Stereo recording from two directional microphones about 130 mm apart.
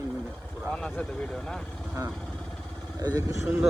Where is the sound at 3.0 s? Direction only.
25° right (ahead or behind).